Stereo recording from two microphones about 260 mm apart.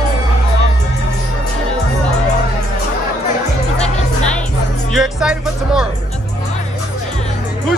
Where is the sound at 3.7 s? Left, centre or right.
Left.